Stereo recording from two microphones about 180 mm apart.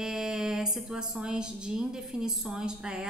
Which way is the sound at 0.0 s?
5° right (ahead or behind).